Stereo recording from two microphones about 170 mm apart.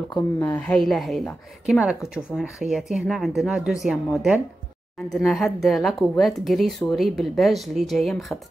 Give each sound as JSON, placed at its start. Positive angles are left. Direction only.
{"t": 0.4, "sound": "a woman's voice", "side_deg": 10}